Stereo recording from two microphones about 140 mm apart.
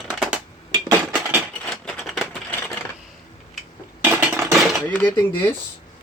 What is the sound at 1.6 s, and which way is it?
Typewriter, 5° left (ahead or behind).